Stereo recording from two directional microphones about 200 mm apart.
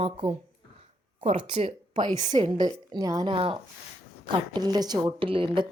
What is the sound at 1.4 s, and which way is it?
A woman's voice, 25° right (ahead or behind).